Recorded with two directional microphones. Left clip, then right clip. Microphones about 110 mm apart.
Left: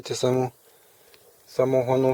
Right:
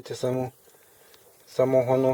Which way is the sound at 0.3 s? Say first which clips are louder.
Left 4 dB; 25° left (ahead or behind).